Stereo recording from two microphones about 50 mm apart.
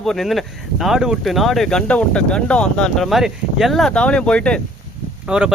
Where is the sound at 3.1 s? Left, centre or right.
Centre.